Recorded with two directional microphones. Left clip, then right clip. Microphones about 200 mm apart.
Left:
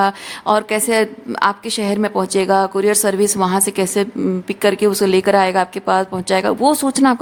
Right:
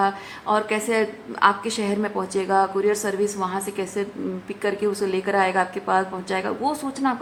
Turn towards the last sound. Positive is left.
turn(degrees=60)  # may be behind; listen again after turning